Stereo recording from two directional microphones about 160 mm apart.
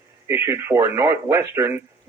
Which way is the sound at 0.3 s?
15° right (ahead or behind).